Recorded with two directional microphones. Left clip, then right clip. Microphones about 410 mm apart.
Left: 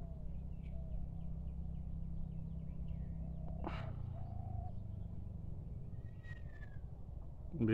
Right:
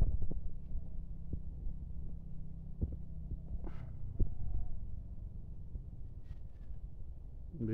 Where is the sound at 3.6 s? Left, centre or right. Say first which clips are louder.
Left 9 dB; centre.